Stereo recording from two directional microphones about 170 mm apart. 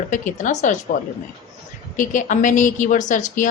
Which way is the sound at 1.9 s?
50° left (ahead or behind).